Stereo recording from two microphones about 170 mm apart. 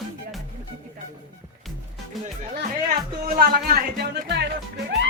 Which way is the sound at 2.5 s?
60° right (ahead or behind).